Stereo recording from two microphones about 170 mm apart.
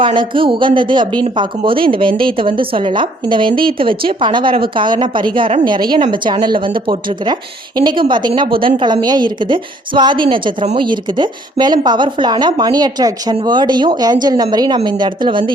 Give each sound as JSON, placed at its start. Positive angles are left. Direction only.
{"t": 0.0, "sound": "a woman's voice", "side_deg": -30}